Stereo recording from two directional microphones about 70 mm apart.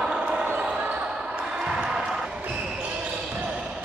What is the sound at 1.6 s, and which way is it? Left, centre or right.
Basketball bounce, centre.